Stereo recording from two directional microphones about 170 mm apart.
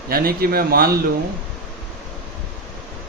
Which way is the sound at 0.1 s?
60° right (ahead or behind).